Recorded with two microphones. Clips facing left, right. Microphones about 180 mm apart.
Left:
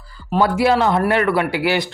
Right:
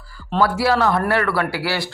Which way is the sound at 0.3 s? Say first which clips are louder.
Left 2 dB; 15° left (ahead or behind).